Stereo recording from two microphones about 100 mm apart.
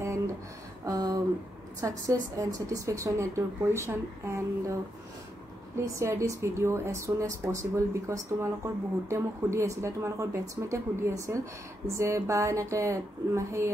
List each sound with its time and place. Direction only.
0.8 s a sound: 40° right (ahead or behind)
1.8 s speech: 35° right (ahead or behind)
5.9 s speech: 30° right (ahead or behind)